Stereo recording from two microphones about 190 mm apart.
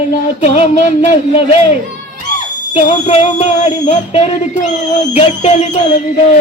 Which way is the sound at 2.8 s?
35° left (ahead or behind).